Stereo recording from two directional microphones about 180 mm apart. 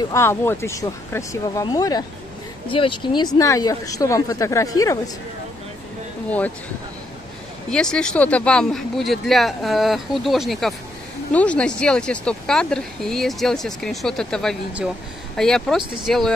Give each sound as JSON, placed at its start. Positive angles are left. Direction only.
{"t": 0.1, "sound": "speech", "side_deg": 15}
{"t": 7.7, "sound": "speech", "side_deg": 5}